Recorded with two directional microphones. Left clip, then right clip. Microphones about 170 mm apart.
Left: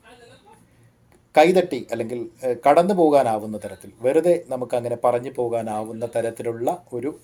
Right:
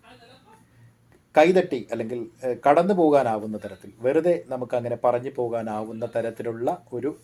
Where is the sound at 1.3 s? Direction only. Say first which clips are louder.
Left 2 dB; 10° left (ahead or behind).